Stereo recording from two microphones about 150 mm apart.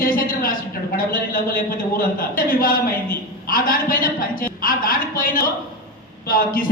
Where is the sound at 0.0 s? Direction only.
70° left (ahead or behind).